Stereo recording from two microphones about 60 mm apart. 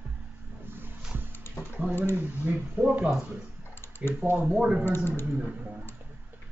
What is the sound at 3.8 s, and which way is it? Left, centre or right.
Typing, left.